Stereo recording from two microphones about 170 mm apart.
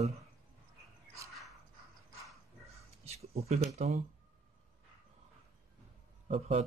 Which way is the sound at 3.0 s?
40° right (ahead or behind).